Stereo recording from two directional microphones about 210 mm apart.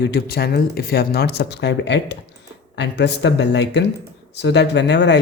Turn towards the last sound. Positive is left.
turn(degrees=55)  # may be behind; listen again after turning